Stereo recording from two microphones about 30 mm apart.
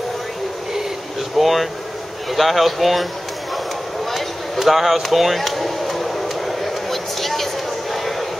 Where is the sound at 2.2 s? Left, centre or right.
Centre.